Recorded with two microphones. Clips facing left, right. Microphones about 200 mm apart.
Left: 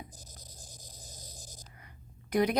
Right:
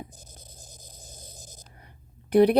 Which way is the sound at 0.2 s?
25° right (ahead or behind).